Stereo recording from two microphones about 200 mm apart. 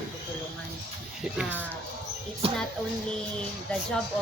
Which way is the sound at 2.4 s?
30° right (ahead or behind).